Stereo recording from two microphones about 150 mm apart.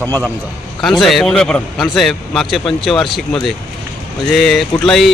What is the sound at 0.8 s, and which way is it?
Speech, centre (ahead or behind).